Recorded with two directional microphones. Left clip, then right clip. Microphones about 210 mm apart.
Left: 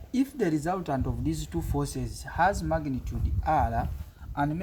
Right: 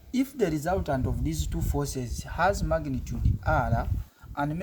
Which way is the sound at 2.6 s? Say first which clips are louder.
Right 1 dB; 40° right (ahead or behind).